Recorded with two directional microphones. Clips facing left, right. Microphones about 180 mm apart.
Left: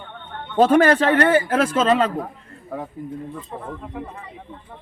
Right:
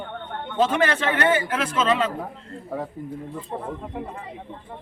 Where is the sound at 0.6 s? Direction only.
40° left (ahead or behind).